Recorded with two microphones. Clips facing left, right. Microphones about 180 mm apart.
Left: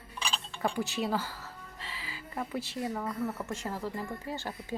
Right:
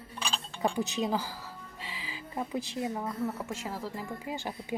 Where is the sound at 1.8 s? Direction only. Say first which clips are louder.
Right 2 dB; 15° right (ahead or behind).